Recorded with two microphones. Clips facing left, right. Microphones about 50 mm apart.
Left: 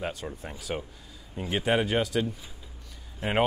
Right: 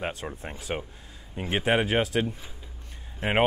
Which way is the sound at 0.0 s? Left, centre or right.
Right.